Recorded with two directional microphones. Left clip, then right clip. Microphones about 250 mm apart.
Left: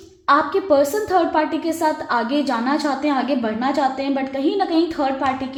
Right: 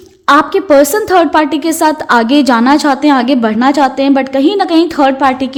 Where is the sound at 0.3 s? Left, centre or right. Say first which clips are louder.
Right 8 dB; right.